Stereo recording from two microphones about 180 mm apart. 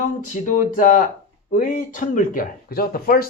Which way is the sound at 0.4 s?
45° left (ahead or behind).